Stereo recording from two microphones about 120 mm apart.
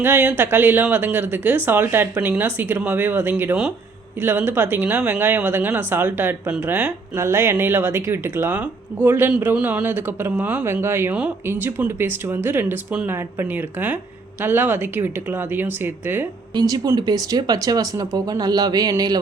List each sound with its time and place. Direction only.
0.0 s speech: 15° right (ahead or behind)
7.2 s speech: 20° right (ahead or behind)
16.6 s speech: 35° right (ahead or behind)